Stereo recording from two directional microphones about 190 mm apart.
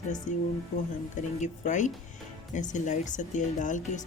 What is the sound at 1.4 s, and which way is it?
Speech, 40° left (ahead or behind).